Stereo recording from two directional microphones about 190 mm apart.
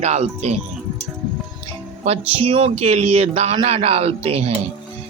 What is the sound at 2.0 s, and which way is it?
Speech, 30° right (ahead or behind).